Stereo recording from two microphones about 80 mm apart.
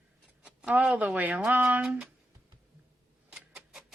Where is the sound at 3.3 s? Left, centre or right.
Centre.